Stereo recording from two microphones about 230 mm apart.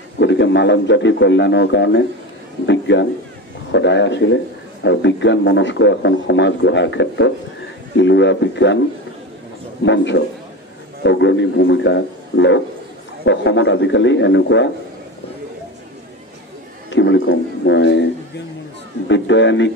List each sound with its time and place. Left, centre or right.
0.2 s a man's voice: left
9.8 s a man's voice: left
16.9 s a man's voice: left
19.0 s a man's voice: left